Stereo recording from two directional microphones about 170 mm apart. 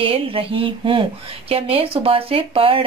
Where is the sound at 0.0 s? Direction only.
30° right (ahead or behind).